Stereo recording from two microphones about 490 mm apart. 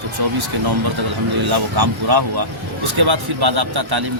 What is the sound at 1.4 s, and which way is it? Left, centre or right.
Speech, right.